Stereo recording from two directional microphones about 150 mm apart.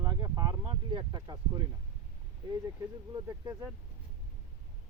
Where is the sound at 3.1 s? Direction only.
20° right (ahead or behind).